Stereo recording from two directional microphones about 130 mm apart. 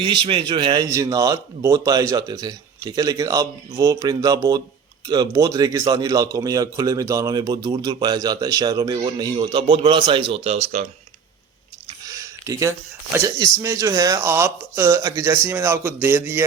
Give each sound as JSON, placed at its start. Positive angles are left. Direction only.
{"t": 0.0, "sound": "a man's voice", "side_deg": -40}
{"t": 12.0, "sound": "a sound", "side_deg": -25}
{"t": 13.1, "sound": "a man's voice", "side_deg": -25}